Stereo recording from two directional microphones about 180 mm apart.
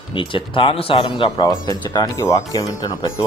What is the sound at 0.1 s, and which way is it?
Speech, 30° left (ahead or behind).